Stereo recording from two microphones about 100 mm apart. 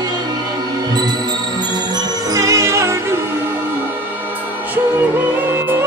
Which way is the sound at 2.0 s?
35° right (ahead or behind).